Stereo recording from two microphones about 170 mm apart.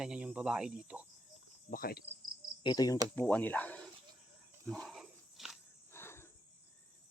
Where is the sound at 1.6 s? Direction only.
60° left (ahead or behind).